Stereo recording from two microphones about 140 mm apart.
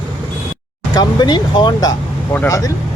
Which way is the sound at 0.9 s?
30° left (ahead or behind).